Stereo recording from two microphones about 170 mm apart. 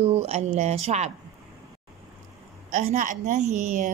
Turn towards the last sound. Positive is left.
turn(degrees=-45)  # may be behind; listen again after turning